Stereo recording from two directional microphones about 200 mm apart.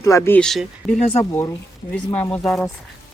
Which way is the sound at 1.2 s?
15° left (ahead or behind).